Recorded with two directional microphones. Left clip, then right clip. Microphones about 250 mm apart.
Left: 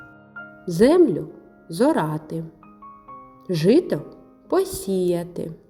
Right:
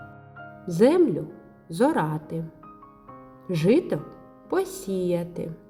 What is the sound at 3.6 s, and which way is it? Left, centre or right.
A woman's voice, centre.